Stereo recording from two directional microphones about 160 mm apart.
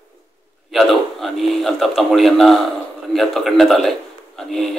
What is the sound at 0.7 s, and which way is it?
Speech, centre (ahead or behind).